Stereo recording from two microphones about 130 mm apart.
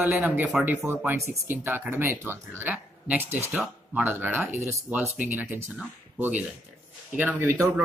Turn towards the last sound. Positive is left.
turn(degrees=-20)  # may be behind; listen again after turning